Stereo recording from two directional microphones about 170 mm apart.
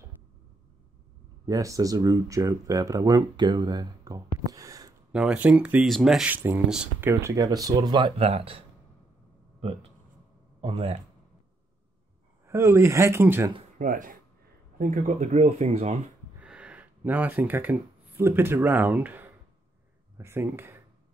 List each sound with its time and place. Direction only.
1.4 s speech: 20° right (ahead or behind)
5.1 s speech: 5° right (ahead or behind); by 8.6 s 35° right (ahead or behind)
12.4 s speech: 15° right (ahead or behind)
13.7 s speech: 50° right (ahead or behind)
16.3 s speech: 5° right (ahead or behind)